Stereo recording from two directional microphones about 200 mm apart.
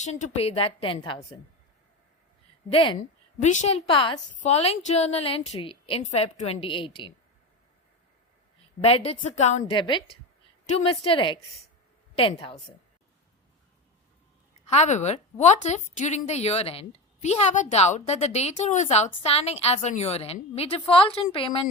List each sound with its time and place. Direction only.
0.0 s a woman's voice: 35° left (ahead or behind)
2.6 s a woman's voice: 25° left (ahead or behind)
3.4 s a woman's voice: 35° left (ahead or behind)
8.8 s a woman's voice: 30° left (ahead or behind)
9.7 s a woman's voice: 25° left (ahead or behind)
14.7 s a woman's voice: 35° left (ahead or behind)